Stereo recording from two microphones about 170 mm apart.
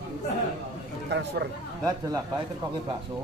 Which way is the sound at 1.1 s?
90° right.